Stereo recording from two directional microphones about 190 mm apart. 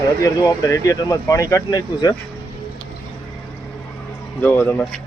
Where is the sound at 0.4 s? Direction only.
15° left (ahead or behind).